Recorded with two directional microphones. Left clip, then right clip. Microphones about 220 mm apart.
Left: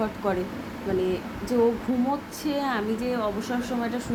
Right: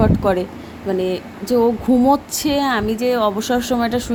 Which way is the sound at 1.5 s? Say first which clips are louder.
Right 8 dB; 40° right (ahead or behind).